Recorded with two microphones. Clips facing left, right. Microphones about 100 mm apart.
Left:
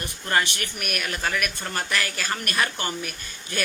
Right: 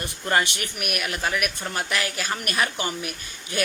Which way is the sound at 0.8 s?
10° right (ahead or behind).